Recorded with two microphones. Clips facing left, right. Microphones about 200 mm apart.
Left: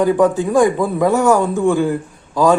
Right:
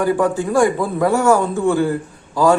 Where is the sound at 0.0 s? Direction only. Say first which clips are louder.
Left 3 dB; 20° left (ahead or behind).